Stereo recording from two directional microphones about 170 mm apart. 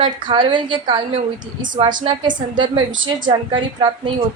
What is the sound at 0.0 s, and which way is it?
A woman's voice, 30° right (ahead or behind).